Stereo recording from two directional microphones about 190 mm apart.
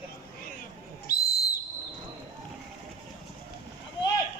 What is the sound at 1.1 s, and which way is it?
Whistle, 55° left (ahead or behind).